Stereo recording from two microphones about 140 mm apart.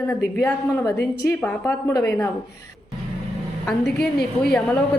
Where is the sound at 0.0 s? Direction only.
20° left (ahead or behind).